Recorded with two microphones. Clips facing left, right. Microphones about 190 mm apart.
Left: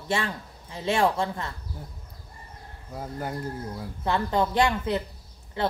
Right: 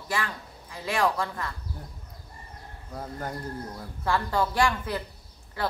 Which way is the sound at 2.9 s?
10° left (ahead or behind).